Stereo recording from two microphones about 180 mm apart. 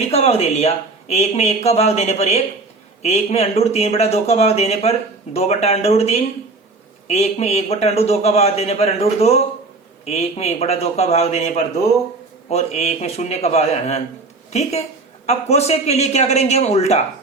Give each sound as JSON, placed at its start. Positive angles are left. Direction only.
{"t": 0.1, "sound": "speech", "side_deg": 35}